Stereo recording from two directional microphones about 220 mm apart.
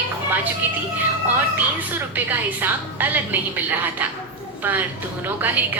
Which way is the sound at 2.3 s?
10° right (ahead or behind).